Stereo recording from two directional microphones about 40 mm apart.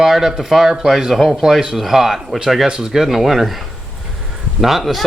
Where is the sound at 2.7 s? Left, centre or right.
Centre.